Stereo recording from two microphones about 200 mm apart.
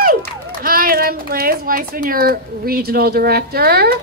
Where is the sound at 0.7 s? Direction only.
45° right (ahead or behind).